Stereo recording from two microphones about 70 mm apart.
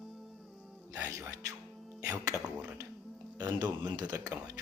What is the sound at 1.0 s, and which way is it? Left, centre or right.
Speech, right.